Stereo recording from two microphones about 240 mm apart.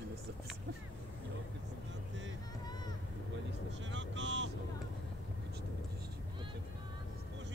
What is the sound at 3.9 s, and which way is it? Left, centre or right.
Vehicle, right.